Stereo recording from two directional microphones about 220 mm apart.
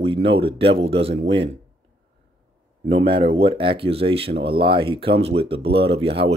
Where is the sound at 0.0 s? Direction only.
25° right (ahead or behind).